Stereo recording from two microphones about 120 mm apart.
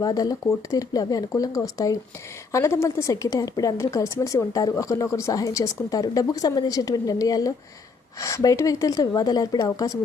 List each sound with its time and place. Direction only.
0.0 s speech: 30° left (ahead or behind)